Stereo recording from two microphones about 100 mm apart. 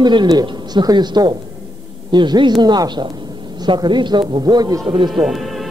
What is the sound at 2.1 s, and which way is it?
A man's voice, 50° right (ahead or behind).